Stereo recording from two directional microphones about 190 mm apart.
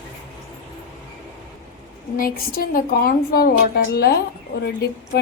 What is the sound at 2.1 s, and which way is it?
A woman's voice, 50° left (ahead or behind).